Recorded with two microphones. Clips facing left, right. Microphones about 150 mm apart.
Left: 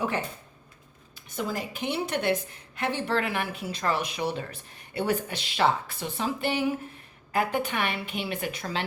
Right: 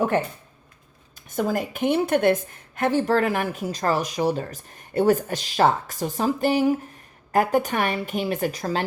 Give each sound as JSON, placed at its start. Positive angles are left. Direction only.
{"t": 1.4, "sound": "a woman's voice", "side_deg": -50}